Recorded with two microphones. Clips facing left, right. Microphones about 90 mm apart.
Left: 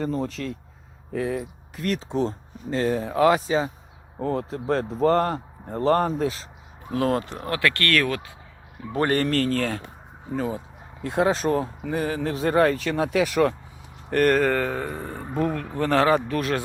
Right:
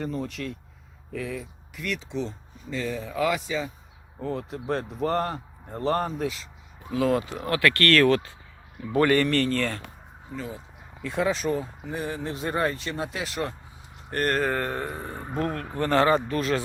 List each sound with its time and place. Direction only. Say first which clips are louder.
0.0 s speech: left 4 dB; 40° left (ahead or behind)
6.9 s speech: even; 50° left (ahead or behind)
7.5 s speech: right 2 dB; 20° left (ahead or behind)
8.9 s speech: right 1 dB; 35° left (ahead or behind); by 10.6 s 60° left (ahead or behind)
11.0 s speech: left 4 dB; 40° left (ahead or behind)
11.5 s speech: left 5 dB; 65° left (ahead or behind)
12.1 s speech: left 9 dB; 85° left
15.5 s speech: left 3 dB; 5° right (ahead or behind)
15.8 s speech: left 1 dB; 85° left; by 16.6 s 60° left (ahead or behind)